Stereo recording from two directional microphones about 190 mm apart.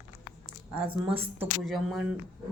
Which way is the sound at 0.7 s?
5° right (ahead or behind).